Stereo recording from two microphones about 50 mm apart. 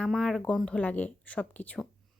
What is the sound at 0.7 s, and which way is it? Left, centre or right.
Speech, left.